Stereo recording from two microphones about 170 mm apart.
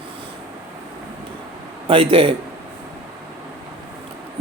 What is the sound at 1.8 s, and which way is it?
Speech, 35° right (ahead or behind).